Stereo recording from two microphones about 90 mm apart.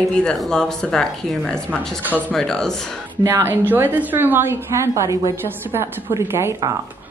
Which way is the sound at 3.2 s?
30° right (ahead or behind).